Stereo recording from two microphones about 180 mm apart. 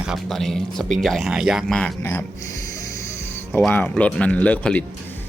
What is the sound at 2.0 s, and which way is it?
Speech, 15° left (ahead or behind).